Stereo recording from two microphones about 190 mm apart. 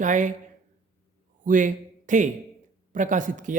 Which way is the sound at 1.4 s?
45° right (ahead or behind).